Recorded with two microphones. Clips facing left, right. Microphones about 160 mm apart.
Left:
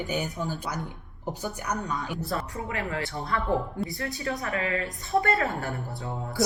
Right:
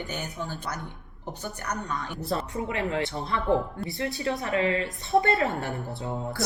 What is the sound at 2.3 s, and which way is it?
A woman's voice, 25° right (ahead or behind).